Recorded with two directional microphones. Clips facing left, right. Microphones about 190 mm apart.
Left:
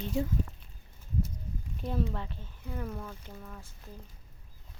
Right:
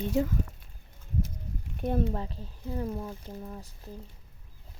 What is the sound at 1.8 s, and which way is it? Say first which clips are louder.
Speech: right 5 dB; 55° right (ahead or behind).